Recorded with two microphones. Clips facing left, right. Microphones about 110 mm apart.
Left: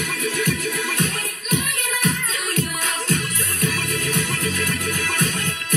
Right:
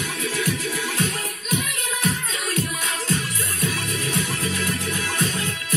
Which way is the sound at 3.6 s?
25° right (ahead or behind).